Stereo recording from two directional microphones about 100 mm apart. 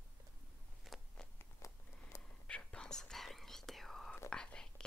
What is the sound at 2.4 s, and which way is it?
Whispering, 10° left (ahead or behind).